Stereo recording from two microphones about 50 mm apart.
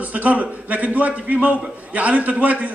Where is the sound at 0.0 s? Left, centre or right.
Right.